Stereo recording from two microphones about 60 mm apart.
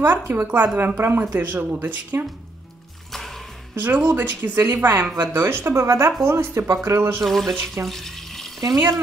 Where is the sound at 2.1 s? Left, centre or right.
Right.